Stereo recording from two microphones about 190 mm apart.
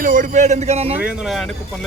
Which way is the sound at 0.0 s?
45° right (ahead or behind).